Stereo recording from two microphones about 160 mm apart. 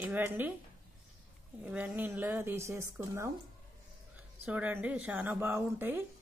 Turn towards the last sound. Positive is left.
turn(degrees=-15)  # may be behind; listen again after turning